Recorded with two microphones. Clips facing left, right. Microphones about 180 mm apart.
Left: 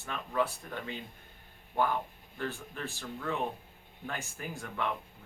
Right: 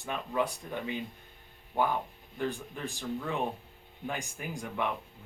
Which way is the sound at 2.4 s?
15° right (ahead or behind).